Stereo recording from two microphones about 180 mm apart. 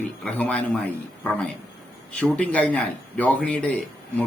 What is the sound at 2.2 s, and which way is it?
A man's voice, 10° left (ahead or behind).